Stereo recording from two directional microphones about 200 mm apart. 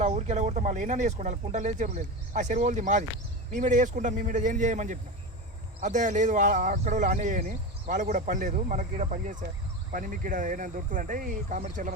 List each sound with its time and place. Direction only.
0.0 s speech: 35° right (ahead or behind)